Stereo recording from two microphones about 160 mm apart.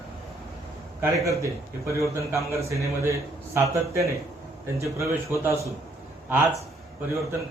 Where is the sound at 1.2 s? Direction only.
20° right (ahead or behind).